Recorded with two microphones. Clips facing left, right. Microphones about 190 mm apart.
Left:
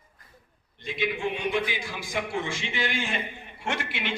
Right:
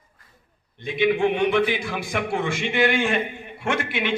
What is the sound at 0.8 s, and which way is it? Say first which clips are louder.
A man's voice: right 9 dB; 60° right (ahead or behind).